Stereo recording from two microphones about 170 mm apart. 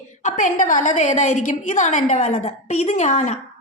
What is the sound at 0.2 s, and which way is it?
A woman's voice, 45° left (ahead or behind).